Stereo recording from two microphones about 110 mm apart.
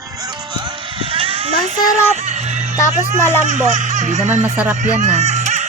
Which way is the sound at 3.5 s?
90° right.